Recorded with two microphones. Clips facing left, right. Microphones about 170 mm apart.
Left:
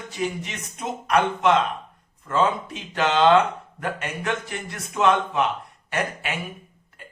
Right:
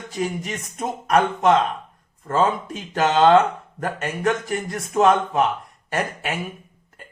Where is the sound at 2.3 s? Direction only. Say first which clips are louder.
Right 2 dB; 45° right (ahead or behind).